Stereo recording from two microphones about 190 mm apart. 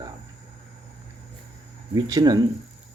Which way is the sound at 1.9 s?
20° right (ahead or behind).